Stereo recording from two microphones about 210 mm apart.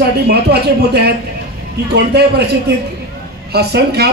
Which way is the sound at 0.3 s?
50° right (ahead or behind).